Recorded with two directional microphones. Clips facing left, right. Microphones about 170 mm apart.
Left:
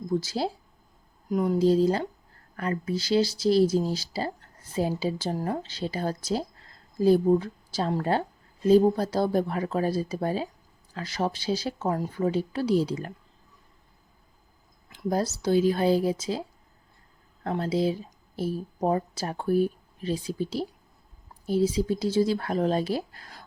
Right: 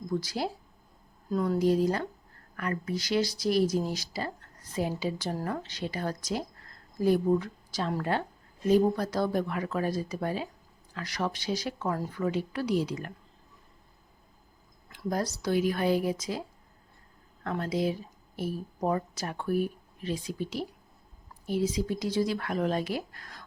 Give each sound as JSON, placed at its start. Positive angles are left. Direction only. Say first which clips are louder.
{"t": 0.2, "sound": "speech", "louder": "left 3 dB", "side_deg": 25}
{"t": 15.1, "sound": "speech", "louder": "left 4 dB", "side_deg": 25}
{"t": 17.4, "sound": "speech", "louder": "left 4 dB", "side_deg": 30}